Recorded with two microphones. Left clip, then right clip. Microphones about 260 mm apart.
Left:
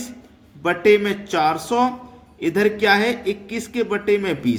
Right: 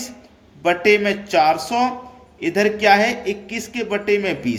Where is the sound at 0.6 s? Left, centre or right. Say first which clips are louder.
Right 1 dB; centre.